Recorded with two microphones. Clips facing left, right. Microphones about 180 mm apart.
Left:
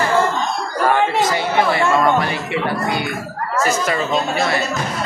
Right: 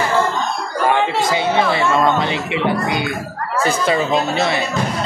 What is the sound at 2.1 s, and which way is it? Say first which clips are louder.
Speech: even; 20° right (ahead or behind).